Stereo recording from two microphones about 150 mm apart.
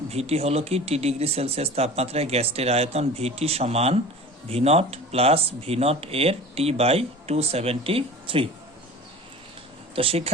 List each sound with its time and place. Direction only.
0.1 s speech: 45° right (ahead or behind)
9.9 s speech: 40° right (ahead or behind)